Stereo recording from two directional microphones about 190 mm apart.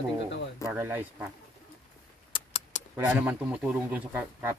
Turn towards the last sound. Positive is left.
turn(degrees=-10)  # may be behind; listen again after turning